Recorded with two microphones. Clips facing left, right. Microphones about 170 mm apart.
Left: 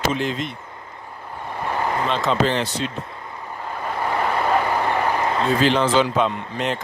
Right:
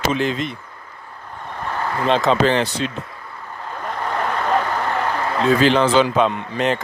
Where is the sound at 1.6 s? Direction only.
15° left (ahead or behind).